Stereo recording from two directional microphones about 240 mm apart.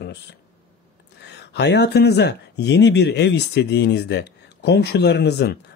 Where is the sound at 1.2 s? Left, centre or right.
Left.